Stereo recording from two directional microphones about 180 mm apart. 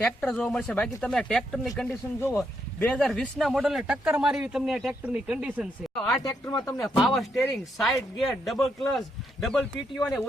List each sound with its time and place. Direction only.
0.0 s speech: 5° left (ahead or behind)
6.2 s speech: 20° left (ahead or behind)
6.7 s speech: centre (ahead or behind)